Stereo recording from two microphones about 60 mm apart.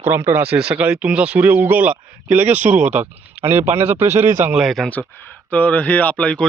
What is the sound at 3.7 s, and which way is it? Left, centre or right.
Speech, right.